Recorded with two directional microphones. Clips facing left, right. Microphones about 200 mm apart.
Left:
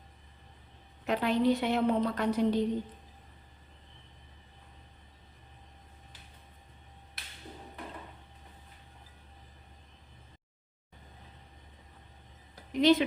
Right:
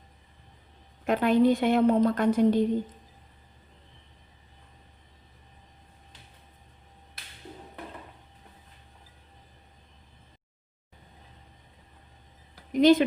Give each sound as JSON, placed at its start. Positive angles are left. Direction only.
{"t": 1.0, "sound": "a woman's voice", "side_deg": -50}
{"t": 12.7, "sound": "speech", "side_deg": -45}